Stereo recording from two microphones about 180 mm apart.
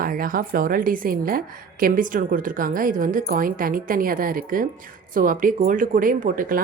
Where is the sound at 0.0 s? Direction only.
50° right (ahead or behind).